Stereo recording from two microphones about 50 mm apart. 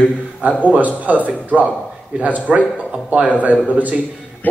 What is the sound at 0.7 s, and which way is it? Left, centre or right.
A man's voice, right.